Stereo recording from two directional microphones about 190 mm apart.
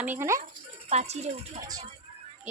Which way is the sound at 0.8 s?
35° right (ahead or behind).